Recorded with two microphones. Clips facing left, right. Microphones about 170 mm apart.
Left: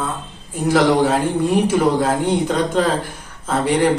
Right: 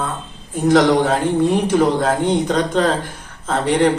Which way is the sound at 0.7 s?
5° left (ahead or behind).